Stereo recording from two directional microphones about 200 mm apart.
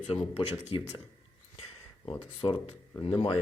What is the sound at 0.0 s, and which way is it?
Speech, 30° left (ahead or behind).